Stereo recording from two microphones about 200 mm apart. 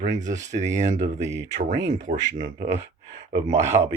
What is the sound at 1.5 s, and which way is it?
Speech, 35° right (ahead or behind).